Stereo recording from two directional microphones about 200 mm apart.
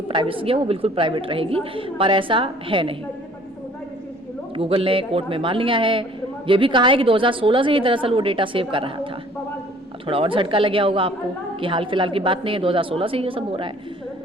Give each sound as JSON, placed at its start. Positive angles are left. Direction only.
{"t": 0.1, "sound": "a woman's voice", "side_deg": -25}
{"t": 4.5, "sound": "a woman's voice", "side_deg": -25}
{"t": 10.1, "sound": "a woman's voice", "side_deg": -25}